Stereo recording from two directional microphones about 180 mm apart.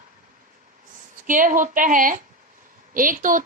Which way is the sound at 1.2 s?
50° right (ahead or behind).